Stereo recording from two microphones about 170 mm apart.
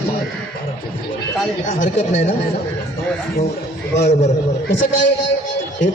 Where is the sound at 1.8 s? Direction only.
45° left (ahead or behind).